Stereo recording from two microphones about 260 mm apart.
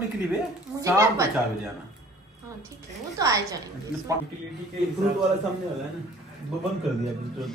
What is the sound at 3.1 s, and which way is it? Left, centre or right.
Speech, centre.